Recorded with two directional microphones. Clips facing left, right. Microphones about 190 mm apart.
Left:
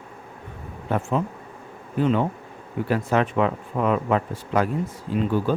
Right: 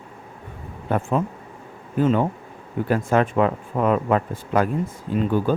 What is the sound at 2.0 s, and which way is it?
Speech, 45° right (ahead or behind).